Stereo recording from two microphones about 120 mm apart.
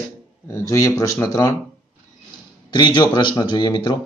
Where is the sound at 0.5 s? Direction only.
25° left (ahead or behind).